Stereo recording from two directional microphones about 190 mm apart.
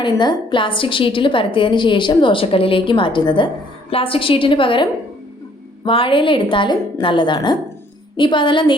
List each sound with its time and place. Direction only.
0.0 s a woman's voice: 25° left (ahead or behind)